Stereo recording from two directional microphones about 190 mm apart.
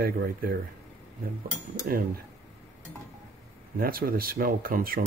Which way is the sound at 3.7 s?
50° right (ahead or behind).